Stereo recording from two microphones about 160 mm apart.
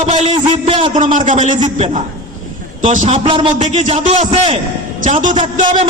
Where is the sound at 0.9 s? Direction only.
50° right (ahead or behind).